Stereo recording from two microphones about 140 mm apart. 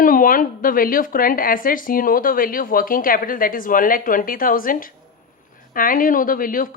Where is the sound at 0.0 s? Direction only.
80° left.